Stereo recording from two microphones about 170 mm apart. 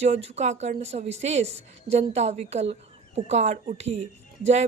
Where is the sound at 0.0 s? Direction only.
40° right (ahead or behind).